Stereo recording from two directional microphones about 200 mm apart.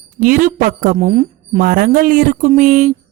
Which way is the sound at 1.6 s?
45° right (ahead or behind).